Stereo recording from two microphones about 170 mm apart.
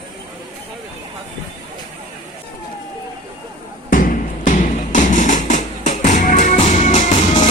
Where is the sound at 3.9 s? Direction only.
55° left (ahead or behind).